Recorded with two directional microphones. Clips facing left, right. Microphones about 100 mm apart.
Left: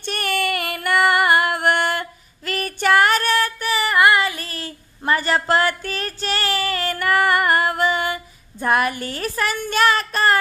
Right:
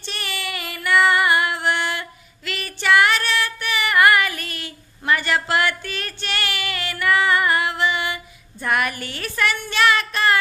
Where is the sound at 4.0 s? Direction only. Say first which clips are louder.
Right 1 dB; 25° left (ahead or behind); by 10.4 s 40° left (ahead or behind).